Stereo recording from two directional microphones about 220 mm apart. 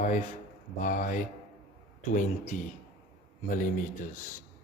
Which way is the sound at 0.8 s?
35° left (ahead or behind).